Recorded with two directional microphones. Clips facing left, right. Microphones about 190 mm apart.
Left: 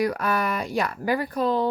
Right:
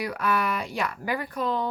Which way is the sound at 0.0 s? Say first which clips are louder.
Left 3 dB; 40° left (ahead or behind).